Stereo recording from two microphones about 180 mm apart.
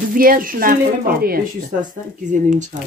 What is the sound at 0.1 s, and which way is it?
Speech, 50° right (ahead or behind).